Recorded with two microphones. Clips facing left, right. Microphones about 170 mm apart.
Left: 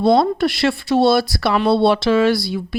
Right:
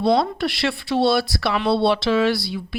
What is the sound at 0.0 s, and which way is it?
Speech, 45° left (ahead or behind).